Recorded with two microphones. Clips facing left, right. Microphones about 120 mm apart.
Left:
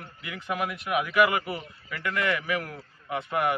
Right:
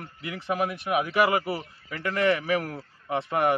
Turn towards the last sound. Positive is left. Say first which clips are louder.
# right 3 dB
turn(degrees=-35)  # may be behind; listen again after turning